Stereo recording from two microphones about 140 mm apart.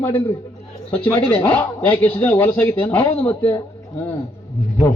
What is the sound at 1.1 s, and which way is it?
Speech, 15° left (ahead or behind).